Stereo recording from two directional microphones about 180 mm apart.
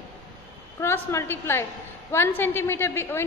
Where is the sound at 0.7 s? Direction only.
15° left (ahead or behind).